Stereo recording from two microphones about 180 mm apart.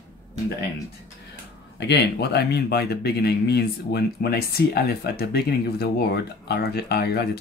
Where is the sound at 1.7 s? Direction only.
70° left (ahead or behind).